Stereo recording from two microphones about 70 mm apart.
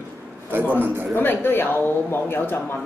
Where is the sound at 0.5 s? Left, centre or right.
Right.